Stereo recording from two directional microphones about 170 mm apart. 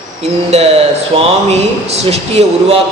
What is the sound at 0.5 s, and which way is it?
Speech, 40° right (ahead or behind).